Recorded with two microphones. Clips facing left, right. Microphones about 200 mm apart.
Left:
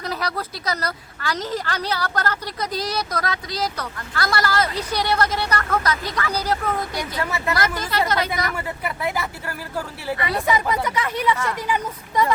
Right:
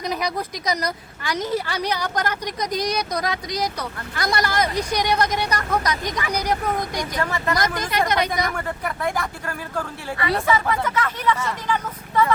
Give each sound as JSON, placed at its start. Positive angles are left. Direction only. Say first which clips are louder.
{"t": 0.0, "sound": "a woman's voice", "louder": "right 2 dB", "side_deg": -15}
{"t": 6.9, "sound": "speech", "louder": "right 1 dB", "side_deg": 10}
{"t": 7.9, "sound": "a woman's voice", "louder": "right 2 dB", "side_deg": -15}
{"t": 8.4, "sound": "speech", "louder": "right 1 dB", "side_deg": 5}
{"t": 10.2, "sound": "speech", "louder": "right 2 dB", "side_deg": 15}